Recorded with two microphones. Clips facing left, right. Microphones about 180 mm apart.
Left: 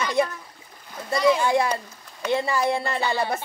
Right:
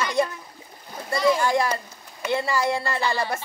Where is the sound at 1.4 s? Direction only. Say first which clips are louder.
Left 1 dB; 20° left (ahead or behind).